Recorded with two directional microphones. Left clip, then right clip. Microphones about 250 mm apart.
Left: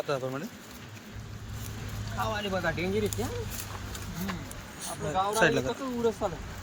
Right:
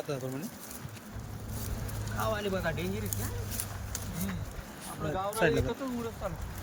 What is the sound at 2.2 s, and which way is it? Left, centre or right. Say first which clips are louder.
Speech: left 2 dB; centre.